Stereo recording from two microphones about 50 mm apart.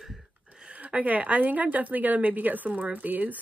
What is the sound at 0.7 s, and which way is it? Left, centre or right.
A woman's voice, right.